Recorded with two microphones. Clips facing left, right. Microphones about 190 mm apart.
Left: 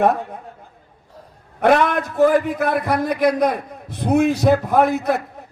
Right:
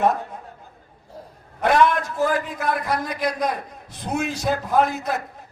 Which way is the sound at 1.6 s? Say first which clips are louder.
Left 2 dB; 60° left (ahead or behind).